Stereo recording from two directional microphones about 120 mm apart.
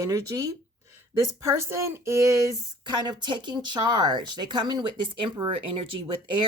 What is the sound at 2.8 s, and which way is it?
Speech, 40° right (ahead or behind).